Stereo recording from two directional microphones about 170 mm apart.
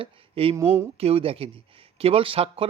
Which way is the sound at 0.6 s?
15° right (ahead or behind).